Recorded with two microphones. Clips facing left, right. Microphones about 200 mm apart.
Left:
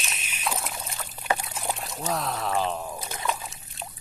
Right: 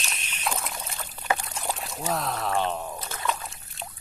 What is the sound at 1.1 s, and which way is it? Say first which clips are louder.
Pour: even; 5° left (ahead or behind).